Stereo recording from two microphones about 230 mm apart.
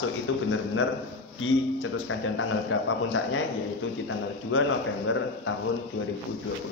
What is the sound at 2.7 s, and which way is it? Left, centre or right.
Speech, left.